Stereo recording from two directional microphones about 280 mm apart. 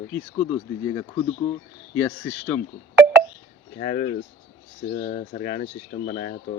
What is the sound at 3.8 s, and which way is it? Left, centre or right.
Speech, left.